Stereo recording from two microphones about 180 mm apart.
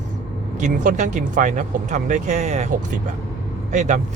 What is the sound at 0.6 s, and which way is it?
Speech, 45° right (ahead or behind).